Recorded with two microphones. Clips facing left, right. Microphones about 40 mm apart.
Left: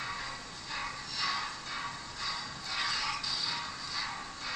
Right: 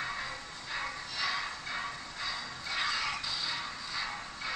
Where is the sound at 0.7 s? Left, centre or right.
Centre.